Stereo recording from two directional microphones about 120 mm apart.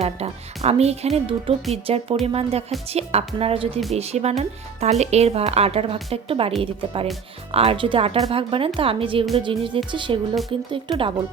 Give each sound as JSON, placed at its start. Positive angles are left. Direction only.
{"t": 0.0, "sound": "speech", "side_deg": -60}
{"t": 3.9, "sound": "speech", "side_deg": -60}